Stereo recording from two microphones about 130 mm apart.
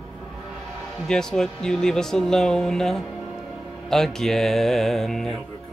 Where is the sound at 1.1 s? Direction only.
5° left (ahead or behind).